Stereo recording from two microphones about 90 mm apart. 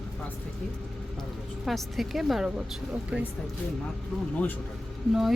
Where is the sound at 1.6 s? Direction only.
Centre (ahead or behind).